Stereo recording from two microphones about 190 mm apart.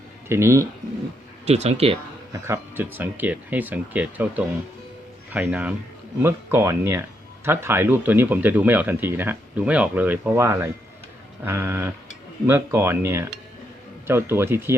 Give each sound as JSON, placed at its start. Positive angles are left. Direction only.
{"t": 0.3, "sound": "speech", "side_deg": -15}
{"t": 1.5, "sound": "speech", "side_deg": -35}
{"t": 2.3, "sound": "speech", "side_deg": -10}